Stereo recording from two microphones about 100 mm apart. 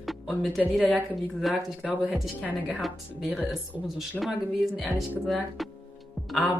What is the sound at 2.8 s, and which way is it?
Speech, centre (ahead or behind).